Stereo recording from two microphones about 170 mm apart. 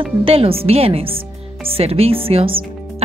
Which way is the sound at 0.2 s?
35° right (ahead or behind).